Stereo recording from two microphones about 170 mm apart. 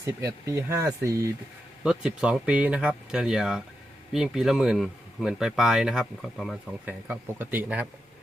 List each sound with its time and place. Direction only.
0.0 s speech: 20° right (ahead or behind)
1.8 s speech: 5° right (ahead or behind)